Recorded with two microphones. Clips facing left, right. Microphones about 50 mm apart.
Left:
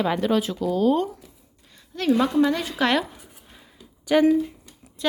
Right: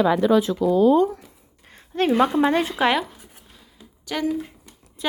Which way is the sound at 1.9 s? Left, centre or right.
Right.